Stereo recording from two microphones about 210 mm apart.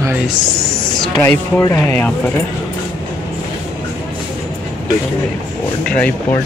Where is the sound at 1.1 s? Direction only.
15° left (ahead or behind).